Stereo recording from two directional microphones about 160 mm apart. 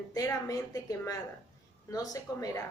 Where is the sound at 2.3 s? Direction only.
20° left (ahead or behind).